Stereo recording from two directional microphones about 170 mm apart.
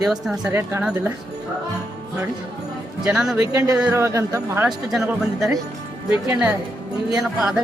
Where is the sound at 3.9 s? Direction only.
15° right (ahead or behind).